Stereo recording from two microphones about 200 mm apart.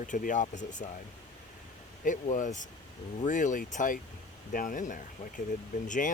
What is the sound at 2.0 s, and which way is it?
Speech, 40° left (ahead or behind).